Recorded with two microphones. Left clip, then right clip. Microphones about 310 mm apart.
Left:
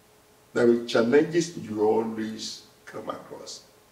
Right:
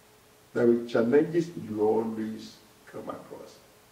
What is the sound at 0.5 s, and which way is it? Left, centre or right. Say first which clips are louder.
A man's voice: left 3 dB; centre.